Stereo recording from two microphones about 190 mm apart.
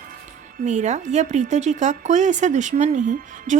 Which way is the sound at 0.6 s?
40° right (ahead or behind).